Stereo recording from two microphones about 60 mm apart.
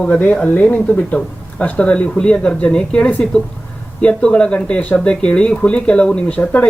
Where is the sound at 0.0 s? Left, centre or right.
Left.